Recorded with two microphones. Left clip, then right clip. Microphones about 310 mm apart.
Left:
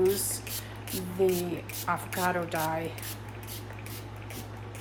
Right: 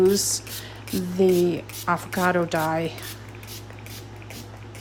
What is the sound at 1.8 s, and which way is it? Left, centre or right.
Speech, right.